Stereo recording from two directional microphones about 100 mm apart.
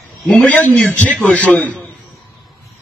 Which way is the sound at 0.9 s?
15° left (ahead or behind).